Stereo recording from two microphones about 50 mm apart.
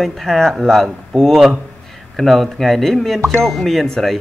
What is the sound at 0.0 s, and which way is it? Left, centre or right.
A man's voice, centre.